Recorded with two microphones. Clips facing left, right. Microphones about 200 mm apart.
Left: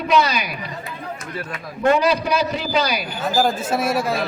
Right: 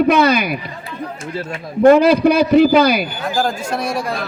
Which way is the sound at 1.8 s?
55° right (ahead or behind).